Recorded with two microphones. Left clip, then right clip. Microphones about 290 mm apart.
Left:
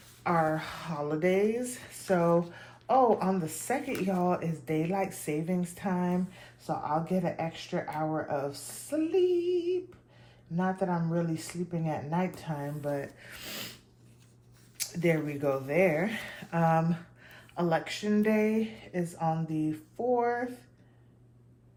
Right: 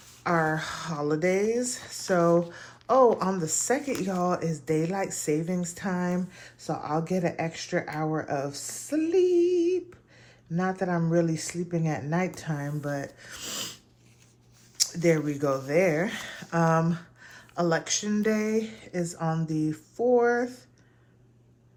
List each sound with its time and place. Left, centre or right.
0.3 s speech: right
15.0 s speech: centre